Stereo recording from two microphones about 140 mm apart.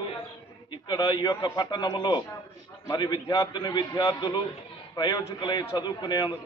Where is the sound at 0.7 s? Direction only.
30° left (ahead or behind).